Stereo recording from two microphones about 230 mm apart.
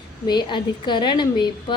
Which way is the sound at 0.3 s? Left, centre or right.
Centre.